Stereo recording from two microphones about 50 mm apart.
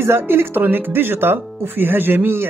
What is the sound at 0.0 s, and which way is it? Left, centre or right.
Speech, right.